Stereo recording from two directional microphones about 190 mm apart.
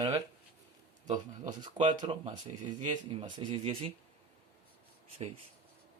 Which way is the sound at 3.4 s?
25° right (ahead or behind).